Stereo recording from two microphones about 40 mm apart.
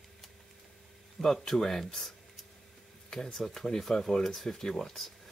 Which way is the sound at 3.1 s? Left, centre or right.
Centre.